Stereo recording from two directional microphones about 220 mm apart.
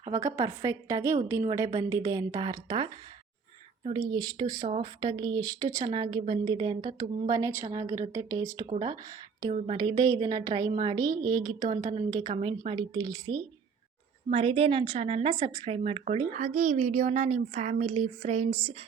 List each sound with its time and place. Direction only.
0.0 s a woman's voice: 15° right (ahead or behind)